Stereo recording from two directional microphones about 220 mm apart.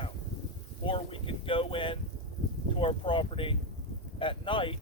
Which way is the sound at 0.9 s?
25° left (ahead or behind).